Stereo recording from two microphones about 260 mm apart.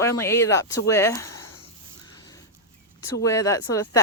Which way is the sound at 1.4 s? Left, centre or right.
Left.